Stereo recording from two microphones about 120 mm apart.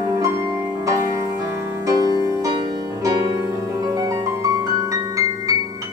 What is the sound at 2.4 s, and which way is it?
Music, 30° right (ahead or behind).